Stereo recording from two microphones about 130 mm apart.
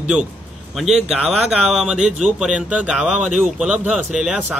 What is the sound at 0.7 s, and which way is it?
Speech, 5° right (ahead or behind).